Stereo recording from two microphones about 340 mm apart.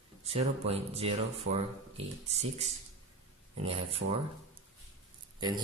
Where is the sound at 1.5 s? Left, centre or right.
Right.